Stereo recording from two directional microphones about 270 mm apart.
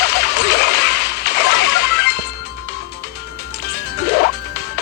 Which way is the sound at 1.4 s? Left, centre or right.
Left.